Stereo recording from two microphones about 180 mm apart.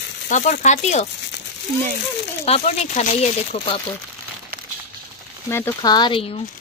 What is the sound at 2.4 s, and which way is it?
Speech, 35° left (ahead or behind).